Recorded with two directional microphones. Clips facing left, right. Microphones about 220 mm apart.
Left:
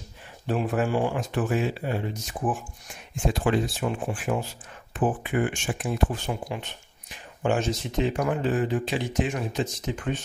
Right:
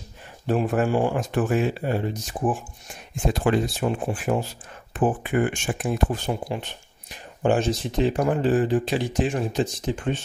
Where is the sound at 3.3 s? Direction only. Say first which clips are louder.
Right 3 dB; 45° right (ahead or behind).